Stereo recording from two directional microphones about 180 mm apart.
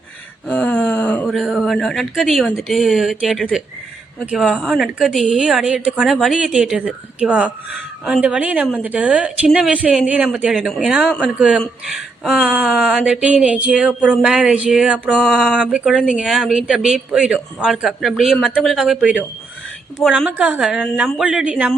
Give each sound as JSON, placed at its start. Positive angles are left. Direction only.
{"t": 0.4, "sound": "a woman's voice", "side_deg": 5}